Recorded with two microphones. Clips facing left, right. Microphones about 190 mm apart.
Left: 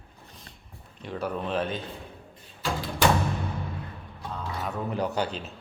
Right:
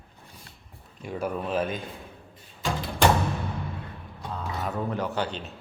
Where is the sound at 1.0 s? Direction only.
10° right (ahead or behind).